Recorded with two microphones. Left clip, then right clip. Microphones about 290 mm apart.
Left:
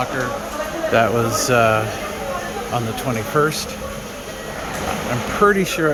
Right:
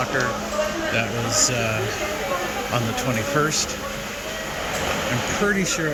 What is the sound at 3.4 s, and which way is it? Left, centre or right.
Speech, centre.